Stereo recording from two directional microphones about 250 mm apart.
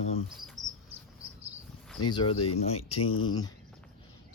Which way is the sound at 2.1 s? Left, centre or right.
Centre.